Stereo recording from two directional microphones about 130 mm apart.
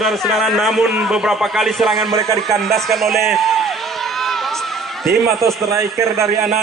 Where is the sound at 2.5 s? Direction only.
Centre (ahead or behind).